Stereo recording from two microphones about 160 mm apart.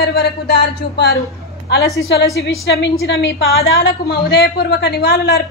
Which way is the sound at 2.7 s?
90° left.